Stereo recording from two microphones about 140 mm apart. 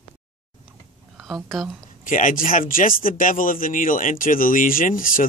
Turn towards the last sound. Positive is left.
turn(degrees=80)